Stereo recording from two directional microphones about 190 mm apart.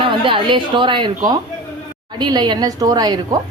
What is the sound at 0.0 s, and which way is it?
A woman's voice, 25° right (ahead or behind).